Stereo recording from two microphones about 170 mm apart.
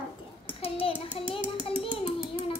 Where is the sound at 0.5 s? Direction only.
35° left (ahead or behind).